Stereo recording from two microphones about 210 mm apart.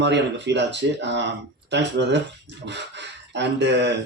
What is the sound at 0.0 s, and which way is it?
A man's voice, 55° right (ahead or behind).